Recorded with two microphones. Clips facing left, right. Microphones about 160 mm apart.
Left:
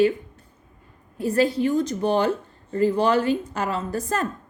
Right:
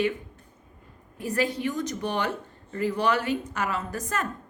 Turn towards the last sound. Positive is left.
turn(degrees=30)  # may be behind; listen again after turning